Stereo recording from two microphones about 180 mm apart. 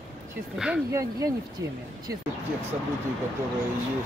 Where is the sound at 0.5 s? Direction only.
5° right (ahead or behind).